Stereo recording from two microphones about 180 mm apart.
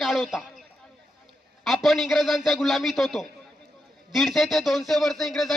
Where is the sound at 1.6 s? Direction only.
Centre (ahead or behind).